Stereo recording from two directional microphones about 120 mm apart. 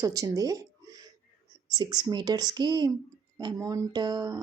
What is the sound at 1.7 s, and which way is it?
Speech, 35° right (ahead or behind).